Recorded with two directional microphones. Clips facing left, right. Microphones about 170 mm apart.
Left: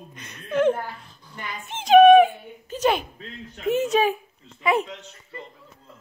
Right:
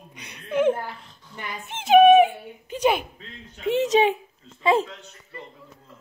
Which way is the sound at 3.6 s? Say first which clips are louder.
Right 1 dB; 25° right (ahead or behind).